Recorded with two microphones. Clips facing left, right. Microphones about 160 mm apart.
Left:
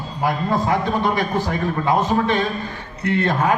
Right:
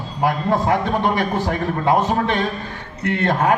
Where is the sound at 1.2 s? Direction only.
60° right (ahead or behind).